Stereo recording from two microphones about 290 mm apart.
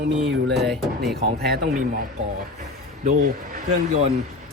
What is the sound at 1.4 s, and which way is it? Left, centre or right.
Speech, right.